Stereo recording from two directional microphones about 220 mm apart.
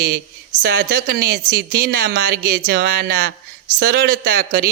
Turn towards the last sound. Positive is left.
turn(degrees=-40)  # may be behind; listen again after turning